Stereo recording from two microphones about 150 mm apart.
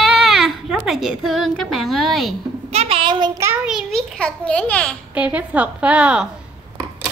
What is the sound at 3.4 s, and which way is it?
Speech, 5° right (ahead or behind).